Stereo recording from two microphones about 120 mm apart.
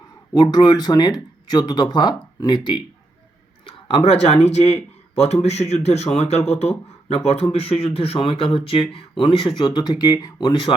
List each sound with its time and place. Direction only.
0.5 s a man's voice: 35° left (ahead or behind)